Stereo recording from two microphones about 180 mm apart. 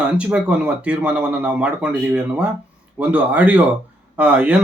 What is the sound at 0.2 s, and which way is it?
Speech, 5° right (ahead or behind).